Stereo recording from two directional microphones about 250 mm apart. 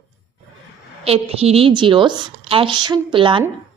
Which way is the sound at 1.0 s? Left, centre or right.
Right.